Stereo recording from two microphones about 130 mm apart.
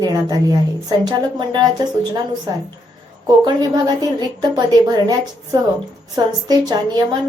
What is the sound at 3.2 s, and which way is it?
A woman's voice, 30° right (ahead or behind).